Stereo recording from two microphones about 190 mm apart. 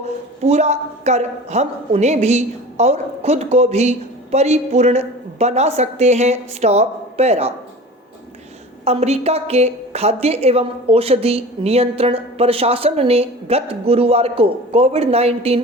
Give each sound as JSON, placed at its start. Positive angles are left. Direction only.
{"t": 0.4, "sound": "a woman's voice", "side_deg": -35}
{"t": 8.8, "sound": "a woman's voice", "side_deg": -35}